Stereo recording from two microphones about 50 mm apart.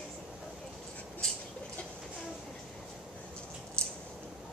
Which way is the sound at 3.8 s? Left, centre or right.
Left.